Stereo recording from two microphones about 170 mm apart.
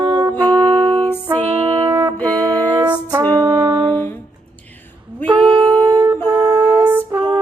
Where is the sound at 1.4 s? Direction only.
40° right (ahead or behind).